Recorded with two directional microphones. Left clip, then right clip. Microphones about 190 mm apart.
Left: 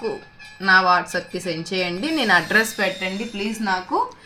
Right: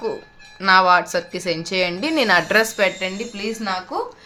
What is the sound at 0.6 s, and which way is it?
Speech, 30° right (ahead or behind).